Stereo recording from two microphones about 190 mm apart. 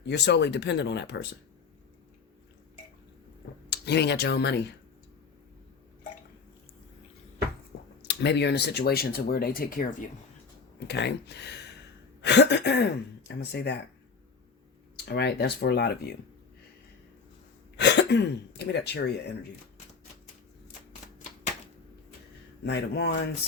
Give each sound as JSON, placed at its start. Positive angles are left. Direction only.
{"t": 0.0, "sound": "speech", "side_deg": 65}
{"t": 3.7, "sound": "speech", "side_deg": 60}
{"t": 8.0, "sound": "speech", "side_deg": 65}
{"t": 10.8, "sound": "speech", "side_deg": 65}
{"t": 14.9, "sound": "speech", "side_deg": 60}
{"t": 17.7, "sound": "speech", "side_deg": 65}
{"t": 22.6, "sound": "speech", "side_deg": 65}